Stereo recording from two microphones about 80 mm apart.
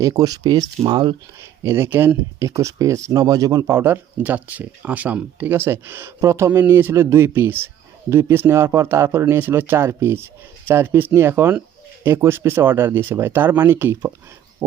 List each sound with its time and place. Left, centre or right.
0.0 s speech: right
0.9 s speech: right
1.6 s speech: right
2.4 s speech: right
3.7 s speech: right
5.5 s speech: right